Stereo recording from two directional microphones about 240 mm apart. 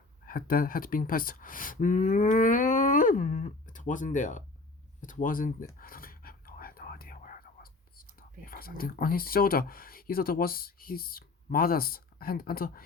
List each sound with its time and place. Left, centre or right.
0.3 s speech: left
5.8 s whispering: left
8.4 s speech: left